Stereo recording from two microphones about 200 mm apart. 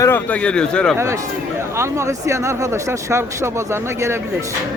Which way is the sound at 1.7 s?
15° right (ahead or behind).